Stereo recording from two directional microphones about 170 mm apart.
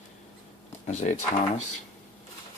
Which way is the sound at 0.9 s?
45° left (ahead or behind).